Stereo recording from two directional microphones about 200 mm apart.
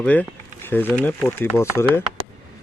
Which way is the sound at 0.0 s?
10° left (ahead or behind).